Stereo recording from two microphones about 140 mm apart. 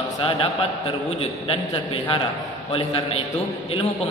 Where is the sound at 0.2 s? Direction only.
40° left (ahead or behind).